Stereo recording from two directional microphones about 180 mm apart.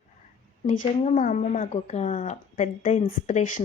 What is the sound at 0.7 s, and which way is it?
Speech, 45° left (ahead or behind).